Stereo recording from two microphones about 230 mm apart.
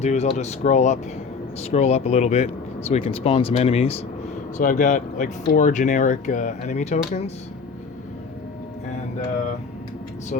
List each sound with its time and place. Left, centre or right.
0.0 s speech: left